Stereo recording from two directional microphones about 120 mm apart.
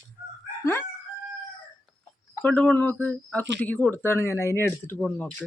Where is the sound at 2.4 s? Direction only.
10° left (ahead or behind).